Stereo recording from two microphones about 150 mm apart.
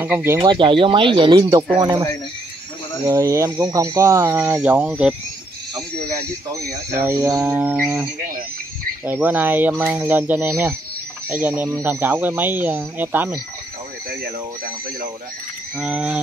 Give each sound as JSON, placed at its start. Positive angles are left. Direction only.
{"t": 0.0, "sound": "speech", "side_deg": -15}
{"t": 0.4, "sound": "speech", "side_deg": -35}
{"t": 1.8, "sound": "speech", "side_deg": -20}
{"t": 3.1, "sound": "speech", "side_deg": -20}
{"t": 6.7, "sound": "speech", "side_deg": -20}
{"t": 7.4, "sound": "speech", "side_deg": -10}
{"t": 15.8, "sound": "speech", "side_deg": -10}